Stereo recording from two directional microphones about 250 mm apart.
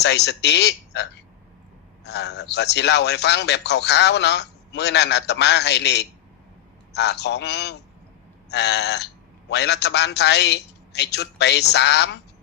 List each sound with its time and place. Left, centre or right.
0.0 s a man's voice: left
2.0 s a man's voice: left